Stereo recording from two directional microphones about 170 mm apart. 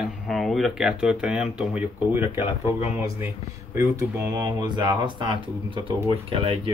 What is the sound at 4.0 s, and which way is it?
Speech, 25° right (ahead or behind).